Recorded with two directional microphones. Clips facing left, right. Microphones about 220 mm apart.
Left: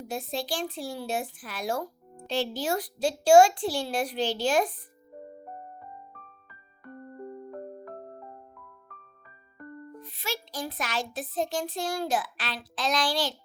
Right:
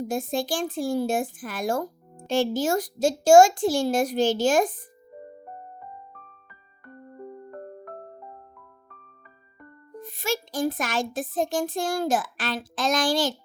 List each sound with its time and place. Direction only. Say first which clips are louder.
0.0 s speech: right 6 dB; 45° right (ahead or behind)
6.8 s music: even; centre (ahead or behind)
10.0 s speech: right 9 dB; 45° right (ahead or behind)